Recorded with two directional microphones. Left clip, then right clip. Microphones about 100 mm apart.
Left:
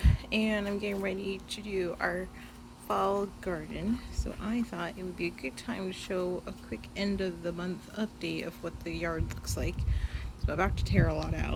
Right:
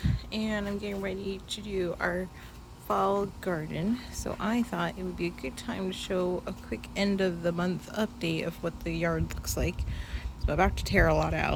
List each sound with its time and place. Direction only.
0.0 s a sound: 25° left (ahead or behind)
0.5 s speech: 5° left (ahead or behind); by 3.7 s 15° right (ahead or behind)
4.4 s speech: 50° right (ahead or behind)
4.7 s speech: 30° right (ahead or behind)
5.1 s speech: 15° right (ahead or behind)
6.4 s speech: 35° right (ahead or behind)
8.3 s speech: 30° right (ahead or behind)
10.8 s speech: 50° right (ahead or behind)